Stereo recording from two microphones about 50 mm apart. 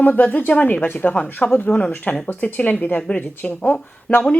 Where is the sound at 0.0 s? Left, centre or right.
Left.